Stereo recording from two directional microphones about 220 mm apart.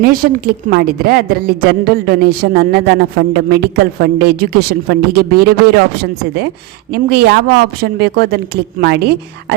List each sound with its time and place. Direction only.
0.0 s a woman's voice: 40° right (ahead or behind)